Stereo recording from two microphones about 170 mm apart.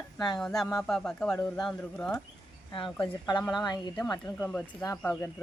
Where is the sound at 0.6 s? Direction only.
5° left (ahead or behind).